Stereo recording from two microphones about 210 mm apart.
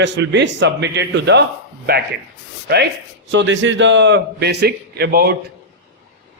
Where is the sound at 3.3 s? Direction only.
60° right (ahead or behind).